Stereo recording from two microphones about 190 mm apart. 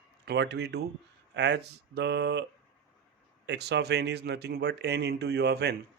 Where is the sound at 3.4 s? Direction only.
65° right (ahead or behind).